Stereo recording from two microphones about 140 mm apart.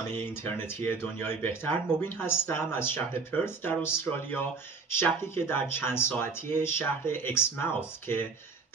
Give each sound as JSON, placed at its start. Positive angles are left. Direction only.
{"t": 0.1, "sound": "speech", "side_deg": 15}